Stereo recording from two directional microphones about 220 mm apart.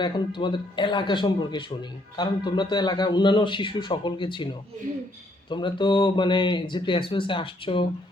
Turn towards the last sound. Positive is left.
turn(degrees=25)  # may be behind; listen again after turning